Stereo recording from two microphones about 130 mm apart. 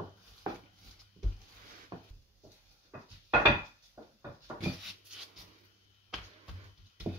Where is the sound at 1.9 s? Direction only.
30° right (ahead or behind).